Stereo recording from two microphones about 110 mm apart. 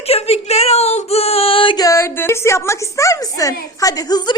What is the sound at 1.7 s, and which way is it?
A woman's voice, 30° left (ahead or behind).